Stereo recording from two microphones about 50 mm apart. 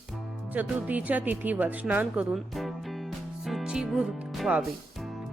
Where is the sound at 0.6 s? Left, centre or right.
Right.